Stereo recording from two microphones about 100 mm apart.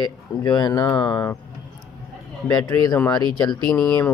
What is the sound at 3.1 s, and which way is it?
Speech, 40° left (ahead or behind).